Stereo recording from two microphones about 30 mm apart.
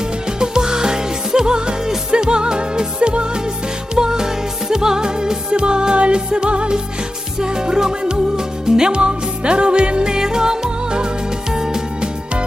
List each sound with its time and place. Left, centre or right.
0.3 s music: right
3.9 s music: right
7.3 s music: right
8.9 s music: right
10.1 s music: right